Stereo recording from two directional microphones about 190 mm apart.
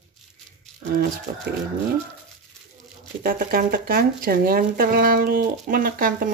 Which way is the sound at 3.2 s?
50° right (ahead or behind).